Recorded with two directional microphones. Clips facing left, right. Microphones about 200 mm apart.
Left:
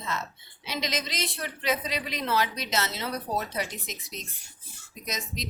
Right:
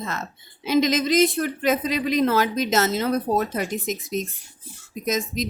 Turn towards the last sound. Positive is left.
turn(degrees=-45)  # may be behind; listen again after turning